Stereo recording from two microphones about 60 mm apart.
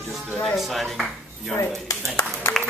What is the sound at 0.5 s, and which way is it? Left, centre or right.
Speech, centre.